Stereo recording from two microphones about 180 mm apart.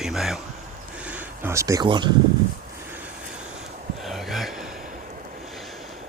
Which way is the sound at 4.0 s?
Centre (ahead or behind).